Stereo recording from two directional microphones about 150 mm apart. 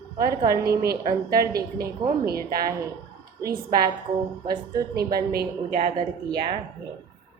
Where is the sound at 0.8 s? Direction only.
85° right.